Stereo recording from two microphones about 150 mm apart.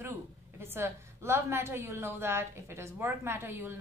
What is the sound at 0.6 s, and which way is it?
A woman's voice, 15° right (ahead or behind).